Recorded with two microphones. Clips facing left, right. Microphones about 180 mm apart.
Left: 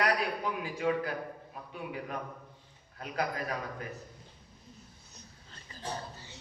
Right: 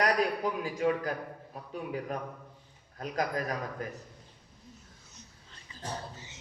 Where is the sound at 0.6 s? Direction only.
40° right (ahead or behind).